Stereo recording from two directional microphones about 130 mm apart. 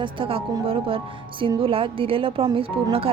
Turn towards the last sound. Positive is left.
turn(degrees=-45)  # may be behind; listen again after turning